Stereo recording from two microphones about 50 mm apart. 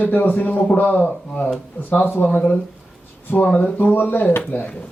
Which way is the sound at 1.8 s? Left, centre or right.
Left.